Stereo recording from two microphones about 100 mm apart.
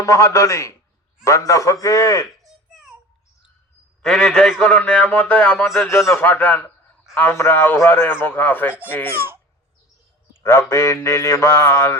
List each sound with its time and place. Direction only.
0.0 s a man's voice: 35° left (ahead or behind)
4.0 s a man's voice: 5° left (ahead or behind)
10.4 s a man's voice: 25° left (ahead or behind)